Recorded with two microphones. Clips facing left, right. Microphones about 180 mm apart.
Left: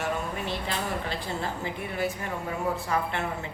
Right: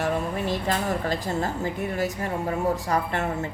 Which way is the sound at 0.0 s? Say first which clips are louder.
Right 5 dB; 40° right (ahead or behind).